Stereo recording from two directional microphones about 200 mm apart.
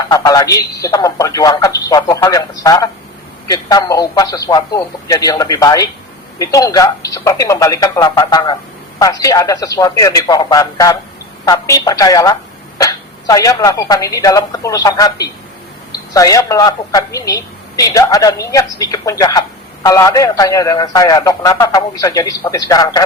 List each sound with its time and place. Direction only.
0.1 s a man's voice: 20° left (ahead or behind)
16.1 s a man's voice: 15° left (ahead or behind)